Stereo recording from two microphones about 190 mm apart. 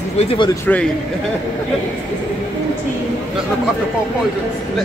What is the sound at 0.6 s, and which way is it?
Speech, 10° left (ahead or behind).